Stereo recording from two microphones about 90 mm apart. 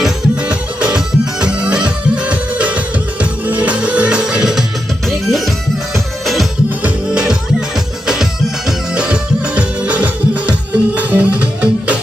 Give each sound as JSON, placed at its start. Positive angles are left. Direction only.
{"t": 0.0, "sound": "music", "side_deg": -10}